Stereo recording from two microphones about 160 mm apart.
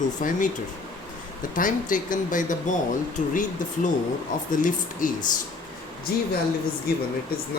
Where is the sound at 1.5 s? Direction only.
60° left (ahead or behind).